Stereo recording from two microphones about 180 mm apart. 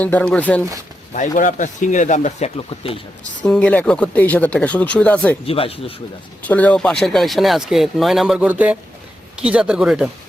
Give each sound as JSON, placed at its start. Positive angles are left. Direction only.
{"t": 0.0, "sound": "speech", "side_deg": 10}
{"t": 1.1, "sound": "speech", "side_deg": 45}
{"t": 3.4, "sound": "speech", "side_deg": 5}
{"t": 5.5, "sound": "speech", "side_deg": 30}
{"t": 6.4, "sound": "speech", "side_deg": 10}